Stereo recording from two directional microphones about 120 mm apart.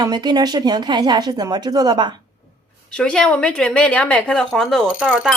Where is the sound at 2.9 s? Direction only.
5° left (ahead or behind).